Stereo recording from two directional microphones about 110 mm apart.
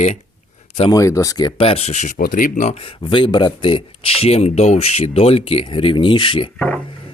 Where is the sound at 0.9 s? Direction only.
30° left (ahead or behind).